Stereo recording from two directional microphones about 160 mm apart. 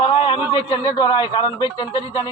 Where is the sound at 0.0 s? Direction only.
35° left (ahead or behind).